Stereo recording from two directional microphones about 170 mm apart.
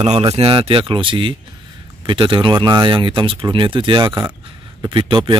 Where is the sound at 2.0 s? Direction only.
30° right (ahead or behind).